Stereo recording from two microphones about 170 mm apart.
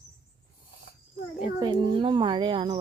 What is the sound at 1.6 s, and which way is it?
A child's voice, 25° right (ahead or behind).